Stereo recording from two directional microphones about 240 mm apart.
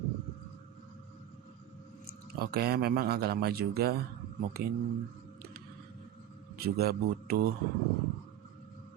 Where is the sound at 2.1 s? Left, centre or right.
Right.